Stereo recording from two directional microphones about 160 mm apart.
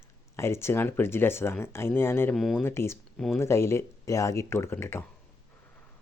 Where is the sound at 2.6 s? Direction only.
15° left (ahead or behind).